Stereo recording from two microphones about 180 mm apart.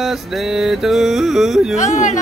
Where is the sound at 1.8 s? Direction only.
45° left (ahead or behind).